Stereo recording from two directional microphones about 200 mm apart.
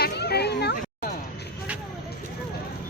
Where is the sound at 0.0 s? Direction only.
55° left (ahead or behind).